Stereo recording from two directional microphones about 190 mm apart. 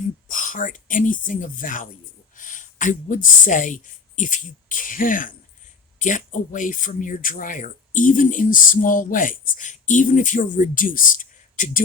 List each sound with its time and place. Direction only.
0.3 s speech: 45° left (ahead or behind)